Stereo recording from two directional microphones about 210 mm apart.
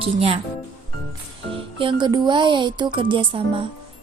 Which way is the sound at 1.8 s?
20° right (ahead or behind).